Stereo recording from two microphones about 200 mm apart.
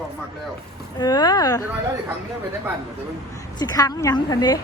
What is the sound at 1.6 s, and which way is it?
Speech, 10° right (ahead or behind).